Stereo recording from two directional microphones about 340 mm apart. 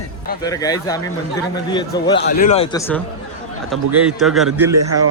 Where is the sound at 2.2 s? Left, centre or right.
Left; by 4.7 s centre.